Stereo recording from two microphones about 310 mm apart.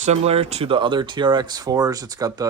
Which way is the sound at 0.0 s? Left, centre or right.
Right.